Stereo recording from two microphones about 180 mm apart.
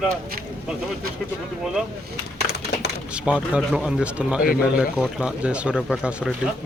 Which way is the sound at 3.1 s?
5° right (ahead or behind).